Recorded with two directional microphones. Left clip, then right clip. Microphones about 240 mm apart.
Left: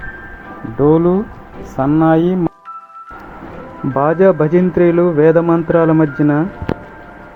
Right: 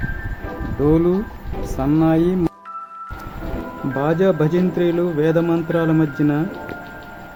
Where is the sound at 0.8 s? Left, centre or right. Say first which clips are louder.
Left 5 dB; centre.